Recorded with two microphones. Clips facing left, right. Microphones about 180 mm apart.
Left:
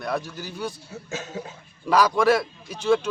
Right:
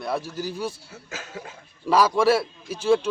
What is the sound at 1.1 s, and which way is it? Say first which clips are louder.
Speech: left 4 dB; 25° left (ahead or behind).